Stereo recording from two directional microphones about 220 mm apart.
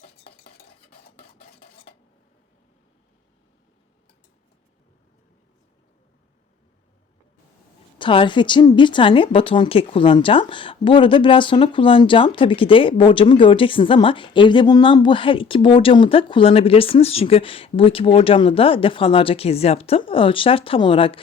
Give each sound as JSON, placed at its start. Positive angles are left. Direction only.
{"t": 7.9, "sound": "a woman's voice", "side_deg": 20}